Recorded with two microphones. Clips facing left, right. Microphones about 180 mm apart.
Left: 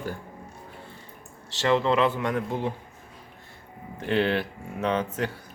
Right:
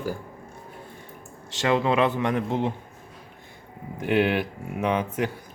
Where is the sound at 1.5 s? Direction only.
15° right (ahead or behind).